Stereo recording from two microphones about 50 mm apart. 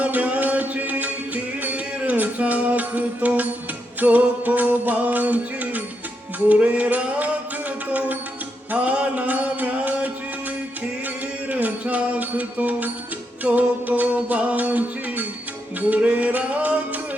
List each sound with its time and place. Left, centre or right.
0.0 s music: right
8.7 s mantra: right
11.0 s music: right